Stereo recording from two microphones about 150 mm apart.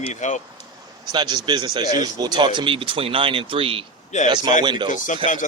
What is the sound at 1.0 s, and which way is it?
Speech, 30° right (ahead or behind).